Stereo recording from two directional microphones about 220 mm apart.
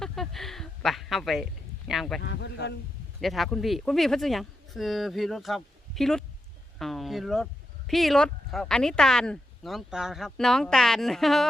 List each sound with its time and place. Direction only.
0.0 s a sound: centre (ahead or behind)
1.9 s speech: centre (ahead or behind)
2.2 s a man's voice: 50° left (ahead or behind)
3.2 s speech: centre (ahead or behind)
6.7 s a sound: centre (ahead or behind)
7.9 s speech: centre (ahead or behind)